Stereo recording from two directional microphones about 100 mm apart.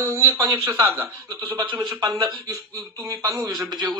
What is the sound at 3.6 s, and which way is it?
Speech, 45° right (ahead or behind).